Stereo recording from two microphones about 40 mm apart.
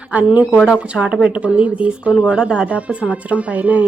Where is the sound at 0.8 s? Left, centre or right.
Right.